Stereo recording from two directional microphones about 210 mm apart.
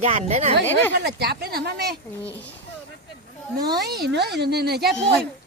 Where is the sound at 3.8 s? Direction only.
50° right (ahead or behind).